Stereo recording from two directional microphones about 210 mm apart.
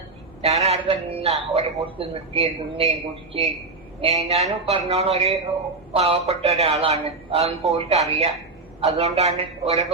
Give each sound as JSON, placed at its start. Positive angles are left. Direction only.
{"t": 0.4, "sound": "a man's voice", "side_deg": -30}